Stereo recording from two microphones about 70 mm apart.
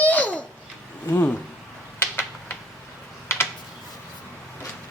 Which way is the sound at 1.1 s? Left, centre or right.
Left.